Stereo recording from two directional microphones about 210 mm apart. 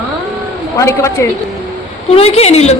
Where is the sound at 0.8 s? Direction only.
15° left (ahead or behind).